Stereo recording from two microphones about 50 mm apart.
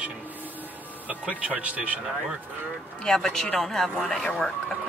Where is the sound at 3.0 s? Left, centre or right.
Centre.